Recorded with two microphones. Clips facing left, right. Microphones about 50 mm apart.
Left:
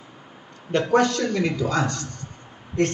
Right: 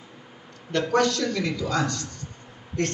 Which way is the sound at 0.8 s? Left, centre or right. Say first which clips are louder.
Left 2 dB; left.